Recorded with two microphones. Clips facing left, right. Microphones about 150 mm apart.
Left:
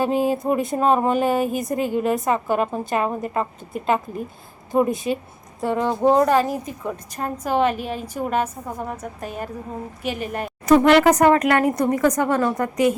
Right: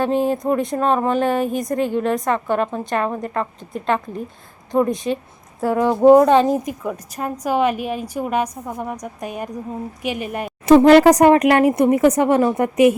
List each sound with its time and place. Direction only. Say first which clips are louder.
0.0 s a woman's voice: right 2 dB; 5° left (ahead or behind); by 6.3 s 10° right (ahead or behind)
6.3 s speech: right 5 dB; 20° right (ahead or behind)
6.8 s a woman's voice: right 2 dB; 5° right (ahead or behind)
10.7 s speech: right 4 dB; 30° right (ahead or behind)